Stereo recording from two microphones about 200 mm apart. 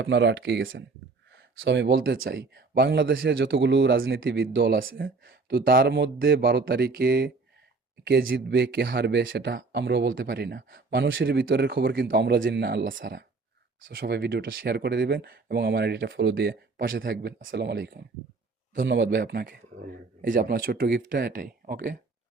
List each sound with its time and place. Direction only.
0.0 s speech: 65° right (ahead or behind); by 21.9 s 45° right (ahead or behind)